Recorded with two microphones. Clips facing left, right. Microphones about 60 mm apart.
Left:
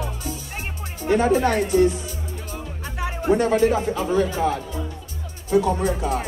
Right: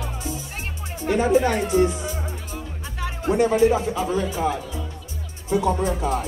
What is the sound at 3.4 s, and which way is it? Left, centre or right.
Speech, left.